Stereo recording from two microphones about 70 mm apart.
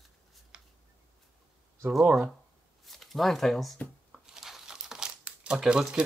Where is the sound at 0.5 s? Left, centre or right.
Centre.